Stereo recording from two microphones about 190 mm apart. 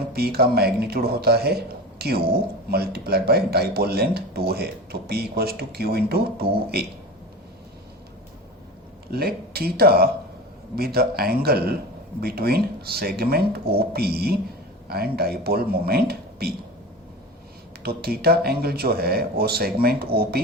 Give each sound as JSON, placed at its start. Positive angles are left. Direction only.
{"t": 0.1, "sound": "speech", "side_deg": -55}
{"t": 9.0, "sound": "speech", "side_deg": -55}
{"t": 17.8, "sound": "speech", "side_deg": -55}